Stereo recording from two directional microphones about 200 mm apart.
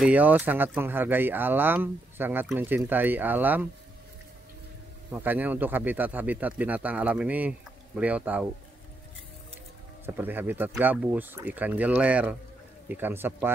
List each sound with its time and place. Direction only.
0.0 s speech: 10° right (ahead or behind)
5.1 s speech: 10° right (ahead or behind)
10.0 s speech: 10° right (ahead or behind)